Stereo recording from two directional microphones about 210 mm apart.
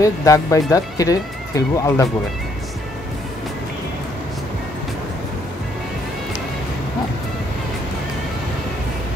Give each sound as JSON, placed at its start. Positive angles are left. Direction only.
{"t": 0.0, "sound": "speech", "side_deg": 15}